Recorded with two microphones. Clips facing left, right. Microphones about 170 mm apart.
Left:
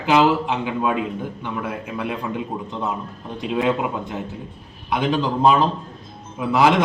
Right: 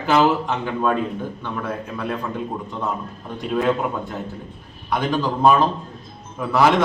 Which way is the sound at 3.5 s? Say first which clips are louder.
Right 1 dB; 15° left (ahead or behind).